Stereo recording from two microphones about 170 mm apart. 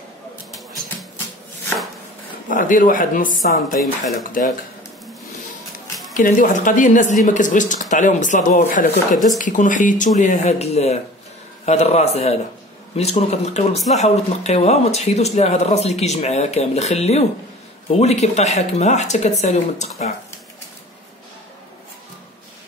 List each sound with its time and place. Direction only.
2.5 s speech: 50° left (ahead or behind)
6.1 s speech: 50° left (ahead or behind)
9.1 s speech: centre (ahead or behind)
9.4 s speech: 50° left (ahead or behind)